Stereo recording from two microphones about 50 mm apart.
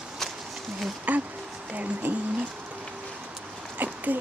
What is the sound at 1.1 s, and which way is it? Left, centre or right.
Speech, right.